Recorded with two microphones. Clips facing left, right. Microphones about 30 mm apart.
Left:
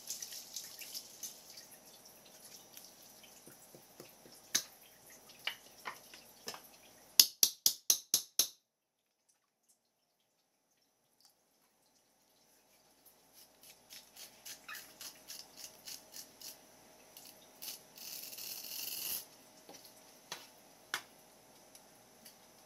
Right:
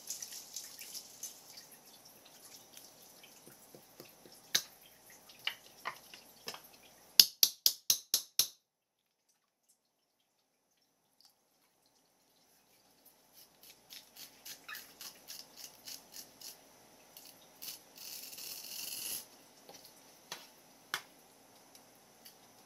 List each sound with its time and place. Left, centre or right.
0.0 s drip: centre
3.2 s drip: centre
4.6 s finger snapping: centre
5.3 s tick-tock: centre
6.5 s drip: centre
7.8 s music: right
12.5 s rub: centre
14.0 s a sound: centre